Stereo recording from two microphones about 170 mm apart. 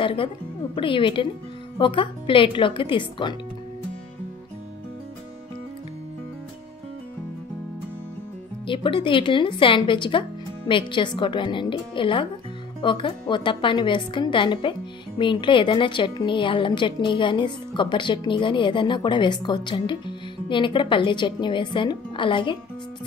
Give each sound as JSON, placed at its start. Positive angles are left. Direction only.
{"t": 0.0, "sound": "a woman's voice", "side_deg": 30}
{"t": 8.6, "sound": "a woman's voice", "side_deg": 30}